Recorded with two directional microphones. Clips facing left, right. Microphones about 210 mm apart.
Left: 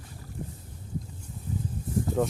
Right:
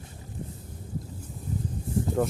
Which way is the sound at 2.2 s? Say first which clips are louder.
Even; 5° left (ahead or behind).